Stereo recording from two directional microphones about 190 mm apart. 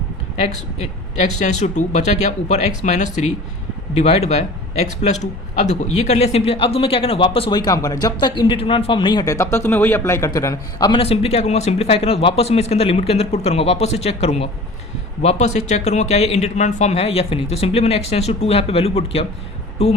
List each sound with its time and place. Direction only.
1.2 s speech: 40° left (ahead or behind)